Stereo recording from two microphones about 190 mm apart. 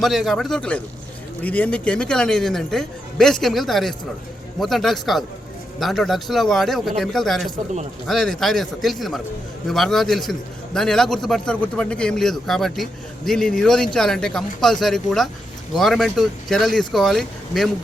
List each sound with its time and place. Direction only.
0.0 s a man's voice: centre (ahead or behind)